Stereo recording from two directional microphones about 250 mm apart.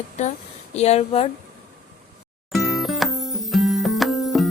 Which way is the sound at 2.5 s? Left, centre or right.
Centre.